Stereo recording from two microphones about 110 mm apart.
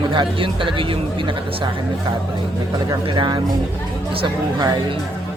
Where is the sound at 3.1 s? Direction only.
50° right (ahead or behind).